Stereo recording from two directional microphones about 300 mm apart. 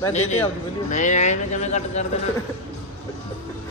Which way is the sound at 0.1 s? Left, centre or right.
Left.